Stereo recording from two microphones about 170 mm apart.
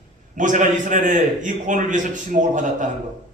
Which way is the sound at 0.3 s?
50° right (ahead or behind).